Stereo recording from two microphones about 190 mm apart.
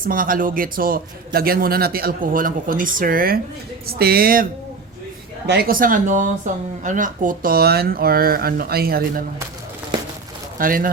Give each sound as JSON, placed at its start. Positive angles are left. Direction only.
{"t": 0.0, "sound": "speech", "side_deg": -45}
{"t": 5.5, "sound": "speech", "side_deg": -55}
{"t": 10.6, "sound": "speech", "side_deg": -45}